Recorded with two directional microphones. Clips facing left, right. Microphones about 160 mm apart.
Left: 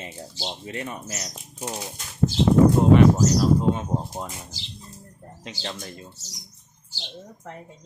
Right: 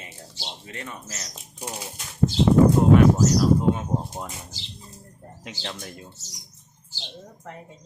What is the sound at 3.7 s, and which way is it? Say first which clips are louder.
Speech: even; centre (ahead or behind).